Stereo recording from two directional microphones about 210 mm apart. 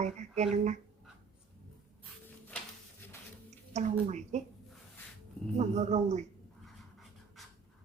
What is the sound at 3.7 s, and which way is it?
Speech, 35° right (ahead or behind).